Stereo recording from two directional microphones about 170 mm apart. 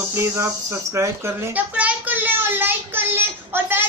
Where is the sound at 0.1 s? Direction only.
15° right (ahead or behind).